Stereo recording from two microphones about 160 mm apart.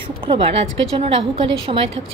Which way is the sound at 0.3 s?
40° right (ahead or behind).